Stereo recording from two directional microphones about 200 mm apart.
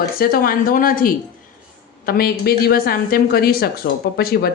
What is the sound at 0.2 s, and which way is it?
A woman's voice, 45° left (ahead or behind).